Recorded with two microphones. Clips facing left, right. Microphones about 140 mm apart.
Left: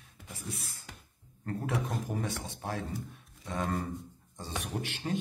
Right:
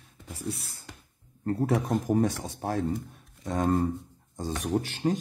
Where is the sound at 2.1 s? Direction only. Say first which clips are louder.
Right 10 dB; 40° right (ahead or behind).